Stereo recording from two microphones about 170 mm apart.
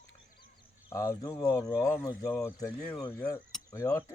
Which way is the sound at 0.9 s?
20° left (ahead or behind).